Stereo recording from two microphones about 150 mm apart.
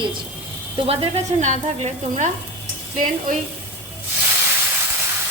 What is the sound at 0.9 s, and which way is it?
Speech, 40° right (ahead or behind).